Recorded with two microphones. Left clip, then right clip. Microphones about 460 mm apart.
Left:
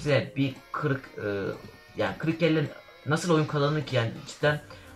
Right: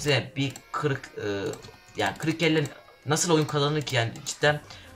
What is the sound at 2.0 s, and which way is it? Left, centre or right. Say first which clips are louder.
Speech: right 1 dB; right.